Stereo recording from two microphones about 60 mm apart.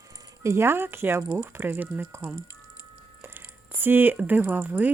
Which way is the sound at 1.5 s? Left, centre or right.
Right.